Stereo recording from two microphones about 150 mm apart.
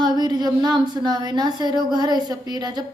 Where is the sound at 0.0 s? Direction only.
25° right (ahead or behind).